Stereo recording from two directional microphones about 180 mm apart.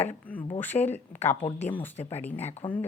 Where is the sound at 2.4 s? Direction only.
35° left (ahead or behind).